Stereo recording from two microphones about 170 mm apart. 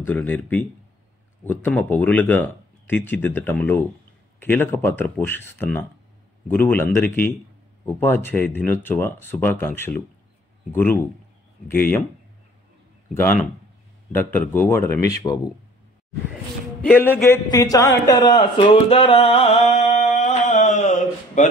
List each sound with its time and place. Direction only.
0.0 s speech: 10° left (ahead or behind)
13.1 s speech: 15° left (ahead or behind)
16.8 s a man's voice: 10° left (ahead or behind); by 21.5 s 45° left (ahead or behind)